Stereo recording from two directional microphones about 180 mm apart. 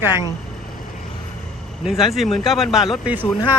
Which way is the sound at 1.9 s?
Centre (ahead or behind).